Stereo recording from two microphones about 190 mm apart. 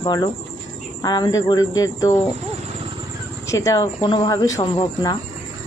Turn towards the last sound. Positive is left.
turn(degrees=20)  # may be behind; listen again after turning